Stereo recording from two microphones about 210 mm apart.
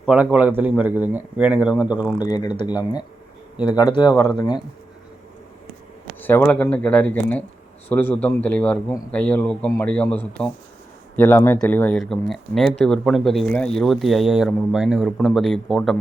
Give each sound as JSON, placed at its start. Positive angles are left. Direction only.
{"t": 0.0, "sound": "a man's voice", "side_deg": -5}
{"t": 2.2, "sound": "speech", "side_deg": 20}
{"t": 6.1, "sound": "a man's voice", "side_deg": 10}